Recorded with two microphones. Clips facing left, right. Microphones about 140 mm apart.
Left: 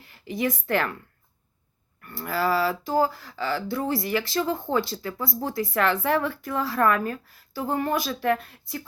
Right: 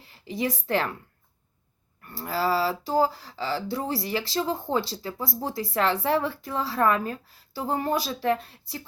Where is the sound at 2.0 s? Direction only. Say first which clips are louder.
Left 1 dB; 35° right (ahead or behind).